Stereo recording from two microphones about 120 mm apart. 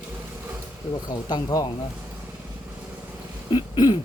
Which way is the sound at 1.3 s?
35° left (ahead or behind).